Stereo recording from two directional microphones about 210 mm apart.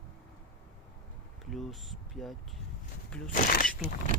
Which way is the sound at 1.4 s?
Centre (ahead or behind).